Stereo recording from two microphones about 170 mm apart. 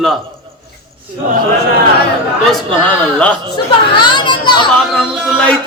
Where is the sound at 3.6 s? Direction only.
25° left (ahead or behind).